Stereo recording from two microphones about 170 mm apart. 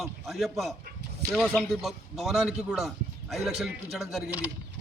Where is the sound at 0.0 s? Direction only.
Centre (ahead or behind).